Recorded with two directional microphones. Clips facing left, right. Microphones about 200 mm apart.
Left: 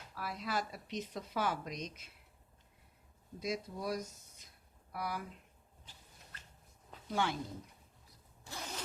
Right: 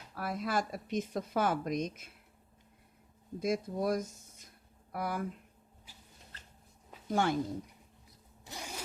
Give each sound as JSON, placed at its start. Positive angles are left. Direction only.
{"t": 0.1, "sound": "speech", "side_deg": -50}
{"t": 3.4, "sound": "speech", "side_deg": -50}
{"t": 7.1, "sound": "speech", "side_deg": -45}
{"t": 8.4, "sound": "zipper", "side_deg": -15}